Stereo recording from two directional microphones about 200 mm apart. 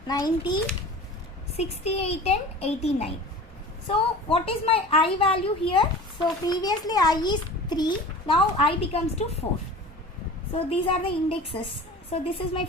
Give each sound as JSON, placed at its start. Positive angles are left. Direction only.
{"t": 0.1, "sound": "a woman's voice", "side_deg": 20}
{"t": 1.5, "sound": "a child's voice", "side_deg": 30}
{"t": 10.5, "sound": "a woman's voice", "side_deg": 25}